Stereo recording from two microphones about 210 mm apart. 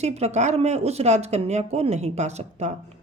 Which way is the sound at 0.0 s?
30° right (ahead or behind).